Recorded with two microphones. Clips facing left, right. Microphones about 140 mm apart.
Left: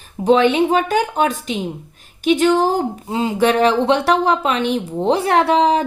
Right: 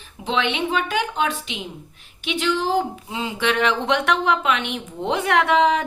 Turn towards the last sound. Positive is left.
turn(degrees=35)  # may be behind; listen again after turning